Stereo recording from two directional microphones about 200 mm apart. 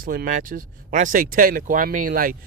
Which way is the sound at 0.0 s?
45° right (ahead or behind).